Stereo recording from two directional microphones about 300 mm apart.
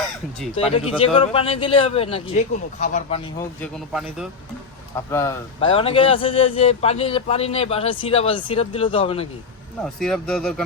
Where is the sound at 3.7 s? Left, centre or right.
Centre.